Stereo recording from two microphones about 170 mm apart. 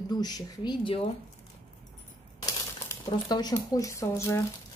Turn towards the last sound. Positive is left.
turn(degrees=15)  # may be behind; listen again after turning